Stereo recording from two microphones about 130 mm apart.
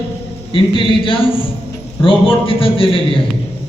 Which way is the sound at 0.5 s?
40° left (ahead or behind).